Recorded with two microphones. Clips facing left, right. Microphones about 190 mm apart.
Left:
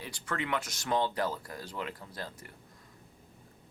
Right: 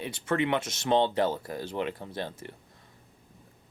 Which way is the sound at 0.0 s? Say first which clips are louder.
Right 8 dB; 25° right (ahead or behind).